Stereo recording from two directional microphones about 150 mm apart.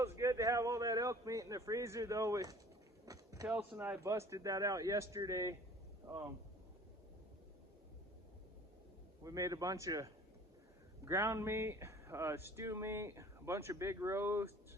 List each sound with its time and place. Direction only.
0.0 s a man's voice: 20° right (ahead or behind)
3.4 s speech: 10° right (ahead or behind)
9.2 s speech: 25° right (ahead or behind)